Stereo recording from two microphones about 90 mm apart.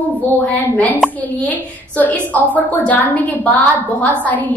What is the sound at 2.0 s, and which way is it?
A woman's voice, 20° left (ahead or behind).